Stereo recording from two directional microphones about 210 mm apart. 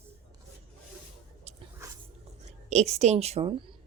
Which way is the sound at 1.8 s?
15° right (ahead or behind).